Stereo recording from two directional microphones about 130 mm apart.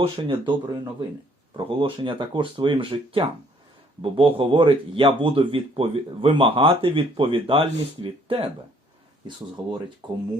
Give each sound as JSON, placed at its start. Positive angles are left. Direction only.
{"t": 0.2, "sound": "speech", "side_deg": -40}
{"t": 1.5, "sound": "speech", "side_deg": -40}
{"t": 9.6, "sound": "speech", "side_deg": -30}